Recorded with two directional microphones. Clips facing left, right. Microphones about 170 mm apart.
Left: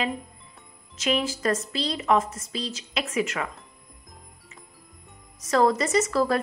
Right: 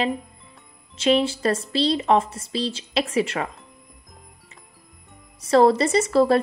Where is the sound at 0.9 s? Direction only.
30° right (ahead or behind).